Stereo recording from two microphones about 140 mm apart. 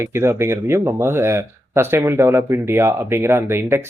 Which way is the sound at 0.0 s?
20° right (ahead or behind).